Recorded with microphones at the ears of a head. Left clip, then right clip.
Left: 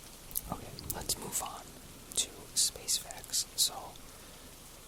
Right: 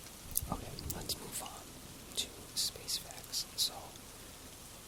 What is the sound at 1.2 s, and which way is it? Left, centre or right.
Whispering, left.